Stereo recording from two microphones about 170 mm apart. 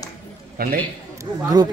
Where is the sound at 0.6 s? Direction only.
60° right (ahead or behind).